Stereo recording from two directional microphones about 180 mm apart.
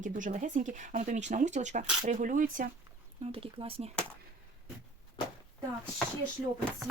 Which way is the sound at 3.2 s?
30° right (ahead or behind).